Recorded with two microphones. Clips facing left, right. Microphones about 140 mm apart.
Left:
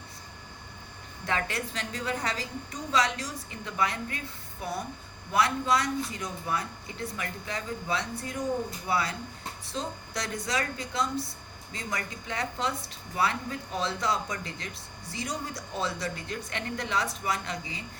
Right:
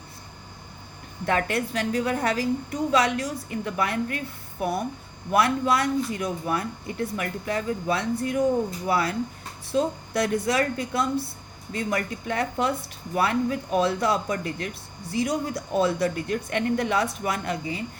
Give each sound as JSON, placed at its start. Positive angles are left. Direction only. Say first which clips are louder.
{"t": 1.3, "sound": "speech", "louder": "right 7 dB", "side_deg": -55}